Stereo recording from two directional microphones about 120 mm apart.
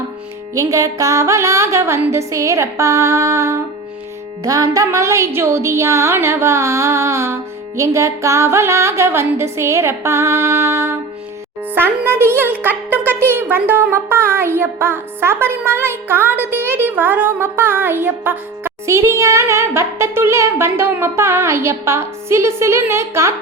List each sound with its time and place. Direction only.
0.5 s speech: 30° right (ahead or behind)